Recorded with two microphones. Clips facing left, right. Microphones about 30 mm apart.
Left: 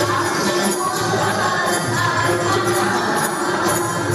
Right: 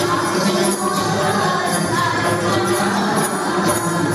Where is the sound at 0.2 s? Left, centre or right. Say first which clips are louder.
Right 1 dB; centre.